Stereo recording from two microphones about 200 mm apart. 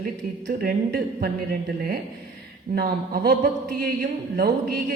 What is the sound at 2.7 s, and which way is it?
A man's voice, 50° right (ahead or behind).